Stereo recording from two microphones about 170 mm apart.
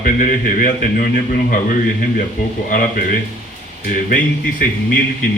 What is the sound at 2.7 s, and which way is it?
Speech, 55° left (ahead or behind).